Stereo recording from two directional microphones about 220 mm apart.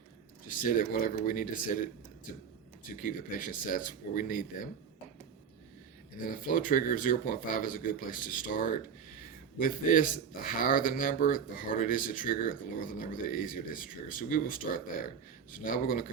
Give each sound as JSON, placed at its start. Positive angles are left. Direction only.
{"t": 0.6, "sound": "speech", "side_deg": 40}
{"t": 3.0, "sound": "speech", "side_deg": 40}
{"t": 6.2, "sound": "speech", "side_deg": 40}
{"t": 15.5, "sound": "speech", "side_deg": 40}